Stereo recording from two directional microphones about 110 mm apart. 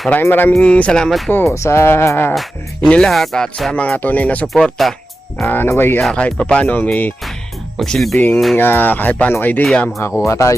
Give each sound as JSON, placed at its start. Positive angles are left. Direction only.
{"t": 0.1, "sound": "speech", "side_deg": 20}
{"t": 1.5, "sound": "music", "side_deg": 25}
{"t": 2.3, "sound": "music", "side_deg": 0}
{"t": 2.9, "sound": "speech", "side_deg": 5}
{"t": 5.5, "sound": "music", "side_deg": 20}
{"t": 6.0, "sound": "music", "side_deg": 0}
{"t": 6.2, "sound": "speech", "side_deg": 10}
{"t": 7.8, "sound": "music", "side_deg": 5}
{"t": 8.1, "sound": "speech", "side_deg": 15}
{"t": 10.2, "sound": "music", "side_deg": 25}